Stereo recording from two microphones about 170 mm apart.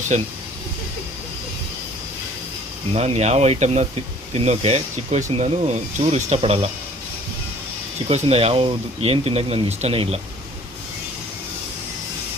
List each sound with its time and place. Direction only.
0.1 s speech: 40° right (ahead or behind)
2.9 s speech: 40° right (ahead or behind)
8.0 s speech: 35° right (ahead or behind)